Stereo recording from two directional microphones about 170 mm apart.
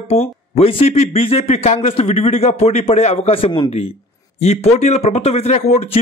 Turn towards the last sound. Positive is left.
turn(degrees=40)  # may be behind; listen again after turning